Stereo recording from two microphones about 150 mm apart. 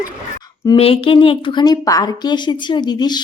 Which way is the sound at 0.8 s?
40° left (ahead or behind).